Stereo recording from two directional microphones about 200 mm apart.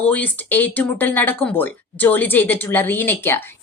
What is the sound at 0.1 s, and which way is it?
A woman's voice, 10° left (ahead or behind).